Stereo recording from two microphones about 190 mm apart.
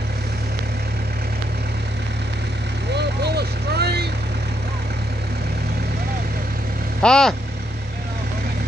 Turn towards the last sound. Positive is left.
turn(degrees=5)  # may be behind; listen again after turning